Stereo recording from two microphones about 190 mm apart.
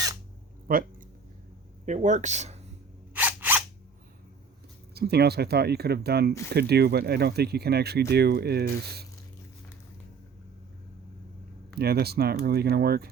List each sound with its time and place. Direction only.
0.7 s speech: 50° right (ahead or behind)
3.2 s a sound: 10° right (ahead or behind)
4.9 s speech: 55° right (ahead or behind)
11.8 s speech: 55° right (ahead or behind)